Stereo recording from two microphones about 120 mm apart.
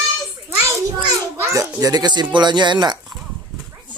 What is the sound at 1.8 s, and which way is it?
Speech, 30° right (ahead or behind).